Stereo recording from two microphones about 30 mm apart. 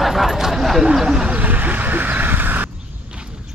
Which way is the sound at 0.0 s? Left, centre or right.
Centre.